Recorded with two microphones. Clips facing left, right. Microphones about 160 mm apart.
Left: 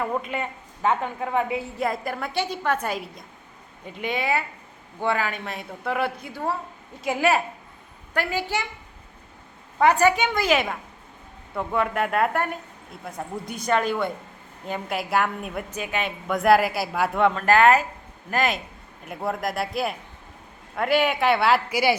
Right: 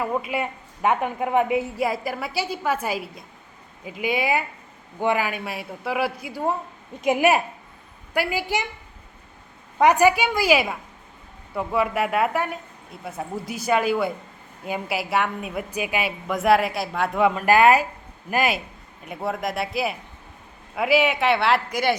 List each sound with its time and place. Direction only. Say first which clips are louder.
0.0 s a woman's voice: right 2 dB; 5° right (ahead or behind)
1.9 s a woman's voice: right 1 dB; 5° right (ahead or behind)
9.7 s a woman's voice: right 2 dB; 15° right (ahead or behind); by 21.9 s 5° left (ahead or behind)